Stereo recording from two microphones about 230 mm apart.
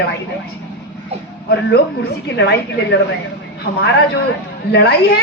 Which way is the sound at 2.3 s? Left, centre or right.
Left.